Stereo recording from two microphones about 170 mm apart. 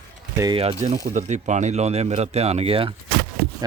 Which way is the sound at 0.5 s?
40° right (ahead or behind).